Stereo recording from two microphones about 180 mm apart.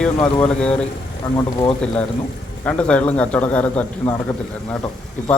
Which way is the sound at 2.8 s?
10° left (ahead or behind).